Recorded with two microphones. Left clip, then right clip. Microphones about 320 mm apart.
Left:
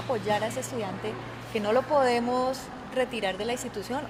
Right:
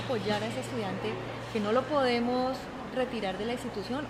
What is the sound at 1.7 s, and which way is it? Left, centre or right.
Speech, left.